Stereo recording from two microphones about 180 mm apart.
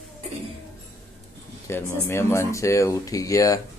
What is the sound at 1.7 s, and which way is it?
Speech, 15° left (ahead or behind).